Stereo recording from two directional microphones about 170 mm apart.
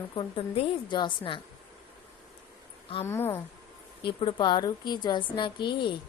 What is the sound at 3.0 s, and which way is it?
Speech, 15° left (ahead or behind).